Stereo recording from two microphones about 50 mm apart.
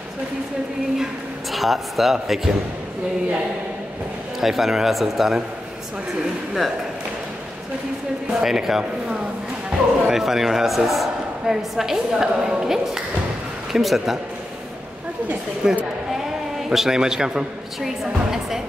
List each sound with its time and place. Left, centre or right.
1.5 s a man's voice: centre
4.4 s a man's voice: centre
8.4 s a woman's voice: centre
15.6 s a woman's voice: centre
16.1 s bleat: centre
17.7 s a woman's voice: centre